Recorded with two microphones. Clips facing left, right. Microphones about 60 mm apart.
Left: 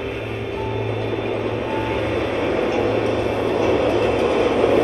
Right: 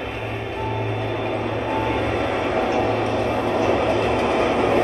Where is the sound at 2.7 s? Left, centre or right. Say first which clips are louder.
Left 1 dB; right.